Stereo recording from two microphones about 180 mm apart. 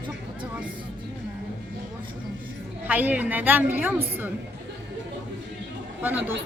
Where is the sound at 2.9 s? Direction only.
10° right (ahead or behind).